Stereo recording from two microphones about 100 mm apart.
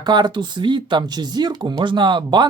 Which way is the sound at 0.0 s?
45° right (ahead or behind).